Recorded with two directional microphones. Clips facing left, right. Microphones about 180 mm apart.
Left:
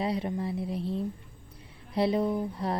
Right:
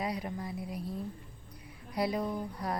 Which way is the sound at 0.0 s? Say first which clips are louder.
Left 6 dB; 25° left (ahead or behind).